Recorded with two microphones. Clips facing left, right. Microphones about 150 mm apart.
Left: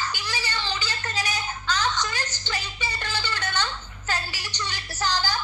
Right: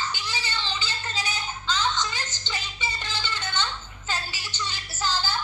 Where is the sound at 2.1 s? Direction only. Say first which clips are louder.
Left 3 dB; 15° left (ahead or behind).